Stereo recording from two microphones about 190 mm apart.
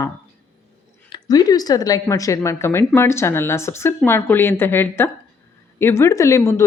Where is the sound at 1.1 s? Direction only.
20° left (ahead or behind).